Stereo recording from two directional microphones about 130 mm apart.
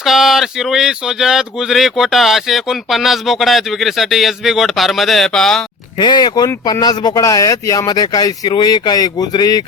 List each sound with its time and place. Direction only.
0.0 s speech: centre (ahead or behind)
6.0 s speech: 35° left (ahead or behind)